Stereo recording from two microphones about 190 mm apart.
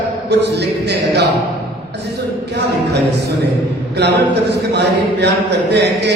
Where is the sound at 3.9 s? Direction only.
60° right (ahead or behind).